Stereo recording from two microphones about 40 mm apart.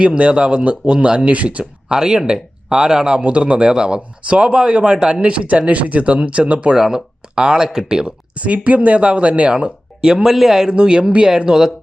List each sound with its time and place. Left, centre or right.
0.0 s speech: right
1.9 s speech: centre
3.2 s speech: right
6.7 s speech: centre
8.4 s speech: right
10.2 s speech: centre
10.7 s speech: right